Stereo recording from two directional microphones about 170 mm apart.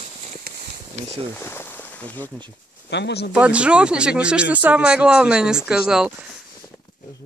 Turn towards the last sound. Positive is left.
turn(degrees=-5)  # may be behind; listen again after turning